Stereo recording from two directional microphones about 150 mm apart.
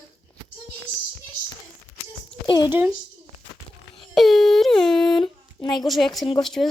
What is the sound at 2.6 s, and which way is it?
Speech, 10° right (ahead or behind).